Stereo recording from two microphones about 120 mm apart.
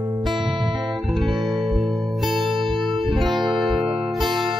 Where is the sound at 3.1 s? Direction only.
Centre (ahead or behind).